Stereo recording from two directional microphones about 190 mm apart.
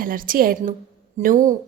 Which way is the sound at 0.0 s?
45° right (ahead or behind).